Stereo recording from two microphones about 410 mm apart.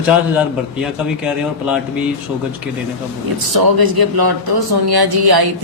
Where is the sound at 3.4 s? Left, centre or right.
Right.